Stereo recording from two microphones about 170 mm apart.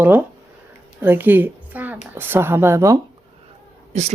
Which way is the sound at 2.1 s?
10° right (ahead or behind).